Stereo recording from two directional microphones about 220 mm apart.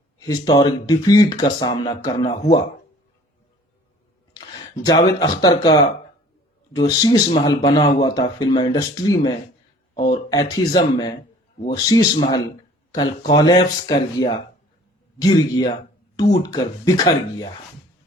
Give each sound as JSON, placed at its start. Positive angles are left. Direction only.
{"t": 0.2, "sound": "speech", "side_deg": 15}
{"t": 4.9, "sound": "speech", "side_deg": 20}